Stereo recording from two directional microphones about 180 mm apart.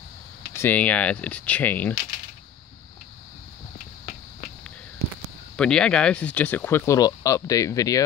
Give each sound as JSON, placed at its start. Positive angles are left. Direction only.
{"t": 0.6, "sound": "speech", "side_deg": 10}
{"t": 3.7, "sound": "a sound", "side_deg": 40}
{"t": 5.6, "sound": "speech", "side_deg": 5}